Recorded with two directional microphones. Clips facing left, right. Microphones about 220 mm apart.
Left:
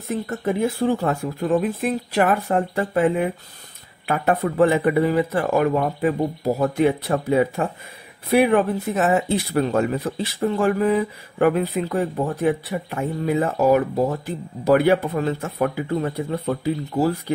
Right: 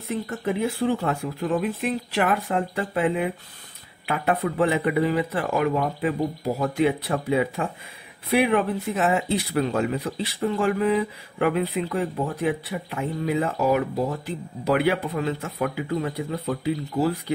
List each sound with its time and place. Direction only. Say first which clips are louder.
0.1 s speech: left 3 dB; 45° left (ahead or behind)